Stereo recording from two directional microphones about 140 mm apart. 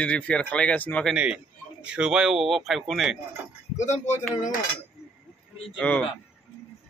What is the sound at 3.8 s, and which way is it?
Speech, 55° left (ahead or behind).